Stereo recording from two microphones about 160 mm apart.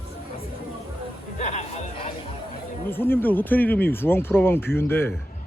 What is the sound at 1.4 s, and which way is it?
Music, 45° left (ahead or behind).